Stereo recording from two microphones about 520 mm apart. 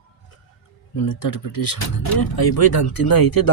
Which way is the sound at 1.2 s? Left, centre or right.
Left.